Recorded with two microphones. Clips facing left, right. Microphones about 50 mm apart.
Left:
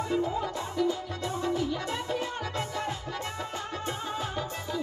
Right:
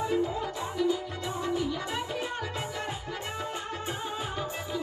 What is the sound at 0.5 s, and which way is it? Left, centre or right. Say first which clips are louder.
Music: even; centre.